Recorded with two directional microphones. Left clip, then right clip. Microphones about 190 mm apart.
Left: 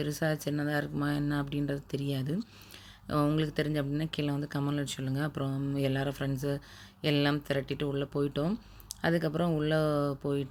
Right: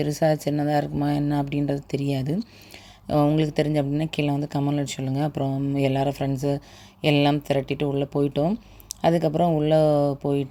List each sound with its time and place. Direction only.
0.0 s speech: 20° right (ahead or behind)